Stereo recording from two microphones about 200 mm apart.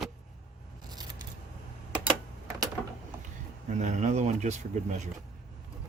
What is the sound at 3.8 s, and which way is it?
Speech, 35° right (ahead or behind).